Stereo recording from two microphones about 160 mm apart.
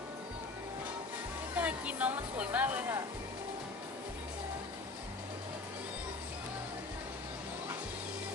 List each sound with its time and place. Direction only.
1.5 s speech: 10° right (ahead or behind)